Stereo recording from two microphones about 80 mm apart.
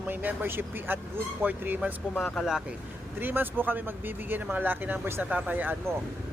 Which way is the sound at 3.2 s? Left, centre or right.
Right.